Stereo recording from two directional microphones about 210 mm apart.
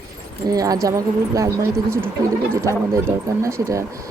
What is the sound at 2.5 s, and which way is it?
Speech, 15° right (ahead or behind).